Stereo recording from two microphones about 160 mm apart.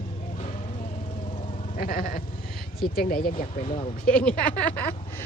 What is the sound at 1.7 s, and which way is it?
Speech, 65° left (ahead or behind).